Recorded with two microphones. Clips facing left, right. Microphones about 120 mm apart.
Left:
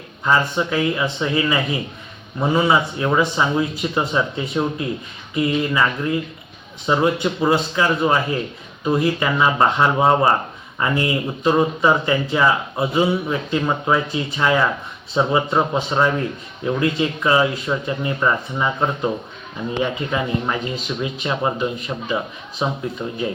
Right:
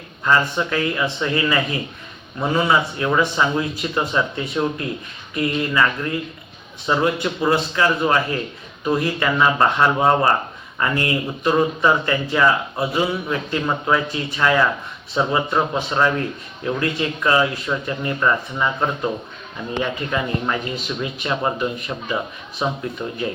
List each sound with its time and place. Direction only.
0.3 s speech: 15° left (ahead or behind)